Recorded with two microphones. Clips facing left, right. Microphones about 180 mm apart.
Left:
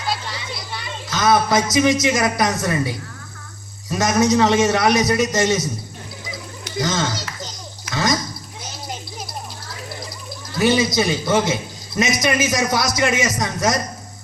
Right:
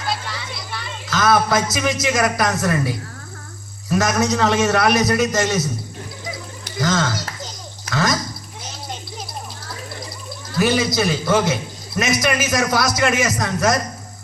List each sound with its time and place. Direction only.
0.7 s music: 20° left (ahead or behind)
1.7 s a man's voice: 20° left (ahead or behind)
6.7 s a child's voice: 20° left (ahead or behind)
10.6 s a man's voice: 20° left (ahead or behind)